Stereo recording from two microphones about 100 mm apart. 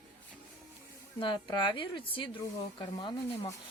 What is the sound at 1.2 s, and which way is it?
A woman's voice, 50° left (ahead or behind).